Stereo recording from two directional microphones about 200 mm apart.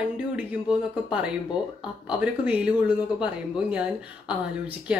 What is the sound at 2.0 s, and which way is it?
Speech, 5° right (ahead or behind).